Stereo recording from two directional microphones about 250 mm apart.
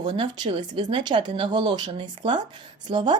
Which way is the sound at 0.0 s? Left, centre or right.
Centre.